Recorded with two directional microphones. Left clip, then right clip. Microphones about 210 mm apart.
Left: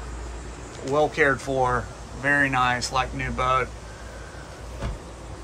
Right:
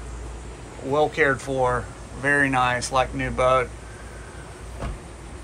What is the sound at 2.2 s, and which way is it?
Speech, 5° left (ahead or behind).